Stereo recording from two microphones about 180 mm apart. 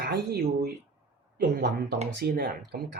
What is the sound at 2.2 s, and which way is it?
Speech, 65° right (ahead or behind).